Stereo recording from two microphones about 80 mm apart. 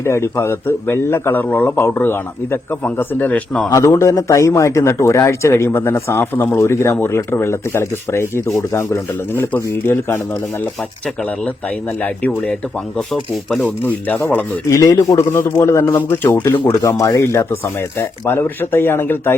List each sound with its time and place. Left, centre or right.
0.0 s a man's voice: left
3.7 s a man's voice: left
14.7 s a man's voice: left
16.8 s speech: left
18.3 s a man's voice: left